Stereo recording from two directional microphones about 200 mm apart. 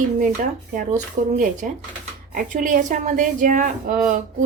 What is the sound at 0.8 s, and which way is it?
A woman's voice, 40° right (ahead or behind).